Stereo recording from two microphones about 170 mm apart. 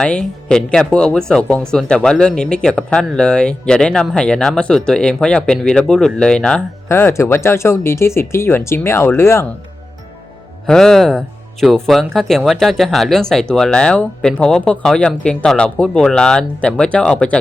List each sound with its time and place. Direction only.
0.0 s speech: 5° left (ahead or behind)
6.8 s speech: 15° left (ahead or behind)
10.7 s speech: 5° left (ahead or behind)